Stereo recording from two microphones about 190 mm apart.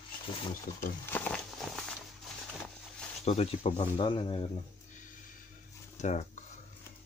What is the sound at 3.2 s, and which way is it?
Speech, 30° left (ahead or behind).